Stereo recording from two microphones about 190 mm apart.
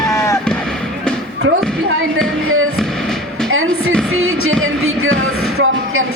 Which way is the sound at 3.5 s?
90° right.